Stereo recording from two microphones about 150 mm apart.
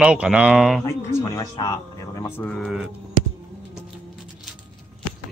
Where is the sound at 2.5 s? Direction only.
5° left (ahead or behind).